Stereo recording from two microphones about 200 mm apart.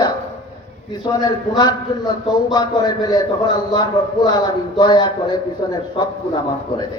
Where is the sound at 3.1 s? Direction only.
20° left (ahead or behind).